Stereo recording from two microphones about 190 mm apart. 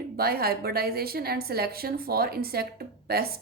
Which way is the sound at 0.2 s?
55° right (ahead or behind).